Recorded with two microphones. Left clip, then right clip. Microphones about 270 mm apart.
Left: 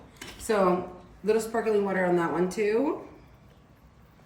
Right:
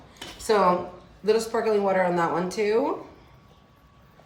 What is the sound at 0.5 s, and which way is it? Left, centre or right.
Speech, right.